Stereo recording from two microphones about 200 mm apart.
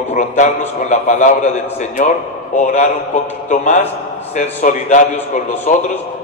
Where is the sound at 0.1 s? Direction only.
35° left (ahead or behind).